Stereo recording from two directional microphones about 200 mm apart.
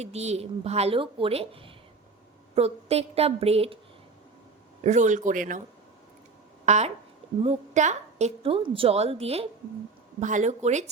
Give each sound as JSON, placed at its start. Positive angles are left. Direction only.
{"t": 0.0, "sound": "a woman's voice", "side_deg": -30}
{"t": 4.8, "sound": "a woman's voice", "side_deg": -35}
{"t": 6.7, "sound": "a woman's voice", "side_deg": -35}